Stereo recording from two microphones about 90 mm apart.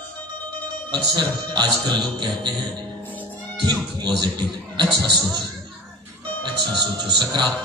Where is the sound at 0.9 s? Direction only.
60° right (ahead or behind).